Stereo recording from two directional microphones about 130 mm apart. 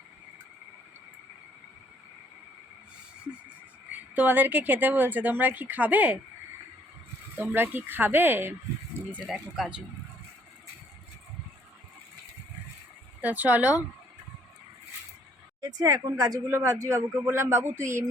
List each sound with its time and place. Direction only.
4.1 s speech: 15° right (ahead or behind)
7.3 s speech: 15° right (ahead or behind)
13.2 s speech: 15° right (ahead or behind)
15.6 s speech: 25° right (ahead or behind)